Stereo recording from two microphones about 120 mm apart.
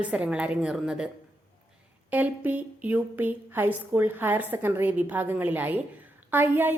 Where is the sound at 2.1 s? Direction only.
15° right (ahead or behind).